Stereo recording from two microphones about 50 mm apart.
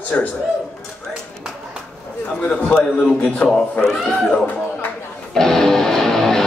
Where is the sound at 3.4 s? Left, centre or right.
Left.